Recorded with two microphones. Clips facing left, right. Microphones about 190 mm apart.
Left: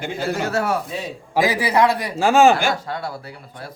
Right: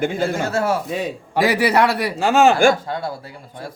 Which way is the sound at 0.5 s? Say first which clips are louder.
Right 1 dB; 25° right (ahead or behind).